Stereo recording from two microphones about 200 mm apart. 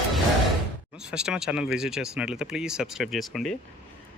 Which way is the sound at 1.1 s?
5° right (ahead or behind).